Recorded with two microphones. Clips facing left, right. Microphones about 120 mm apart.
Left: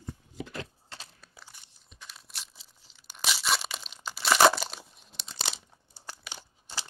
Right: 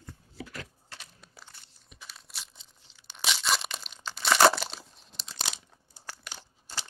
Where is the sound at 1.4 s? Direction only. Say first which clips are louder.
Even; 15° left (ahead or behind).